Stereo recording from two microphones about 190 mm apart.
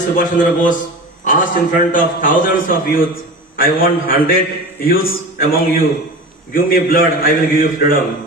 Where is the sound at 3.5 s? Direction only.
50° left (ahead or behind).